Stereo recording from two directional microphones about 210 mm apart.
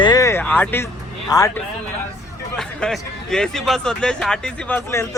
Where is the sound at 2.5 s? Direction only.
Centre (ahead or behind).